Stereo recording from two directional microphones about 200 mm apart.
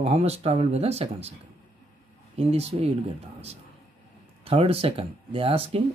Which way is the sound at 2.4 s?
30° right (ahead or behind).